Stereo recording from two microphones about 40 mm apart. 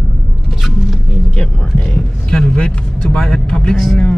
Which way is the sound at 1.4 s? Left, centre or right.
Centre.